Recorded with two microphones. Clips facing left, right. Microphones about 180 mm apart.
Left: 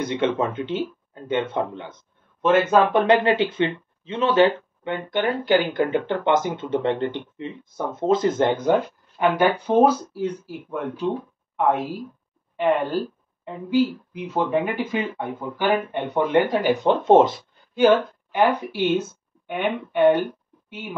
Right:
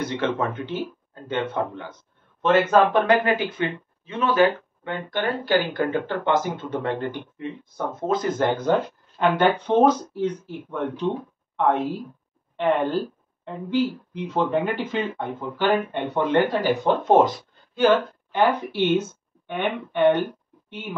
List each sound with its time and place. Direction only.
0.0 s speech: 20° left (ahead or behind)
9.4 s speech: 10° left (ahead or behind)
13.5 s speech: 10° left (ahead or behind)